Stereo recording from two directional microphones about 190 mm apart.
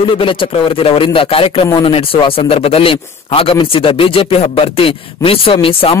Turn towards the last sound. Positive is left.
turn(degrees=30)  # may be behind; listen again after turning